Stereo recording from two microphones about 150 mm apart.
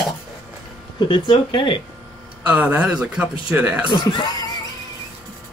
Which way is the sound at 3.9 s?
30° left (ahead or behind).